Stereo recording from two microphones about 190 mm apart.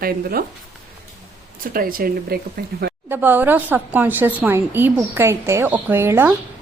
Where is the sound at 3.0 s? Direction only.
10° right (ahead or behind).